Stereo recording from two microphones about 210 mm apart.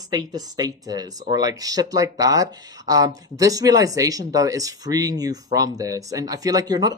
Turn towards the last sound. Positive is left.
turn(degrees=-15)  # may be behind; listen again after turning